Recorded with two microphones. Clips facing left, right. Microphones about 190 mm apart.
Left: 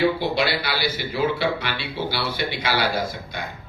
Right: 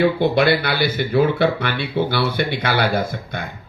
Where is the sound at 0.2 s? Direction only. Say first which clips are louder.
Right 7 dB; 55° right (ahead or behind).